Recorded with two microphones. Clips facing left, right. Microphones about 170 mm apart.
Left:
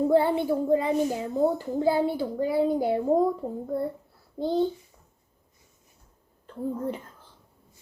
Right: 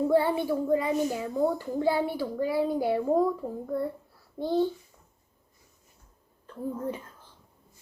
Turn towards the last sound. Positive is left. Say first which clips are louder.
# left 2 dB
turn(degrees=30)  # may be behind; listen again after turning